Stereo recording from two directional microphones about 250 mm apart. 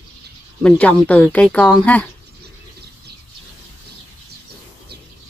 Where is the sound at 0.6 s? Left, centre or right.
Centre.